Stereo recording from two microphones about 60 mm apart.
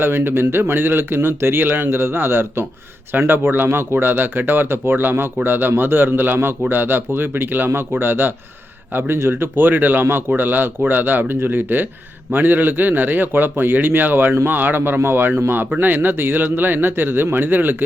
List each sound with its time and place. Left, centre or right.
0.0 s speech: right